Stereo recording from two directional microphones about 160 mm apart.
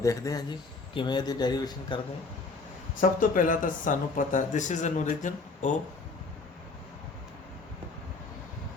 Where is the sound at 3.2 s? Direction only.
55° left (ahead or behind).